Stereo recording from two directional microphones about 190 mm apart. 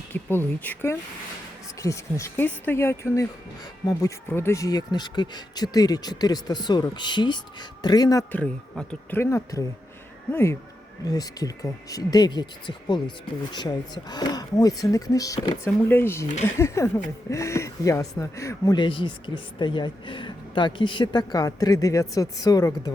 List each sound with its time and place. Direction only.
0.1 s speech: 10° left (ahead or behind)
8.3 s speech: 5° left (ahead or behind); by 15.5 s 20° left (ahead or behind)
15.6 s speech: 10° left (ahead or behind)